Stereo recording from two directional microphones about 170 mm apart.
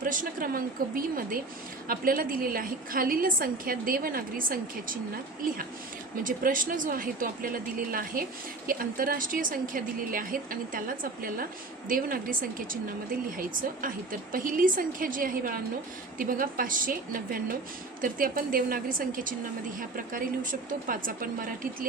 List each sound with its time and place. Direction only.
0.0 s speech: 55° right (ahead or behind)